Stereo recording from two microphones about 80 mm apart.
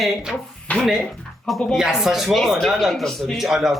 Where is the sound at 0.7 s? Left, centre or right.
Centre.